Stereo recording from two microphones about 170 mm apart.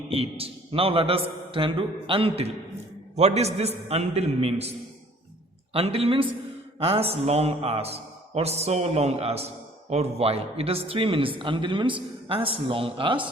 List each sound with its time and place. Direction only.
0.1 s a man's voice: 35° right (ahead or behind)
5.7 s a man's voice: 35° right (ahead or behind)